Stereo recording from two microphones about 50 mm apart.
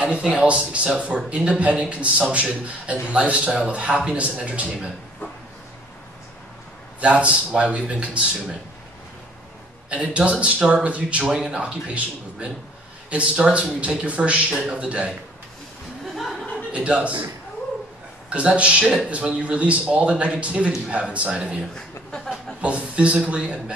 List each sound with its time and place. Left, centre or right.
0.0 s speech: right
7.0 s speech: right
9.8 s speech: right
11.2 s speech: centre
16.2 s chuckle: centre
16.7 s speech: right
18.3 s speech: right
21.7 s speech: centre
22.6 s speech: right